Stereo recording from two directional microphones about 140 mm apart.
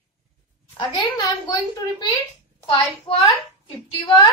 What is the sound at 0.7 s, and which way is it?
A woman's voice, 30° left (ahead or behind).